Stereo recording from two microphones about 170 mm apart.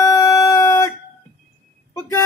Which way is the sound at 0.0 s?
20° left (ahead or behind).